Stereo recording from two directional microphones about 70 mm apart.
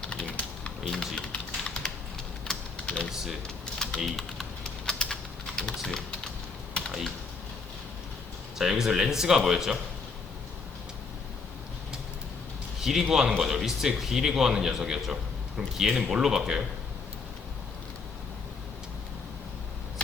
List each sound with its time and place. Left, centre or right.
0.0 s typing: centre
2.5 s typing: centre
8.5 s a man's voice: centre
12.8 s a man's voice: centre